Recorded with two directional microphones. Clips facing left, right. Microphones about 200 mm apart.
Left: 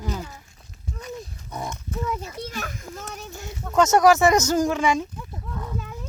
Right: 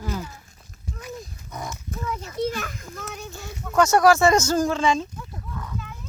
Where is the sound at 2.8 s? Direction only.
20° left (ahead or behind).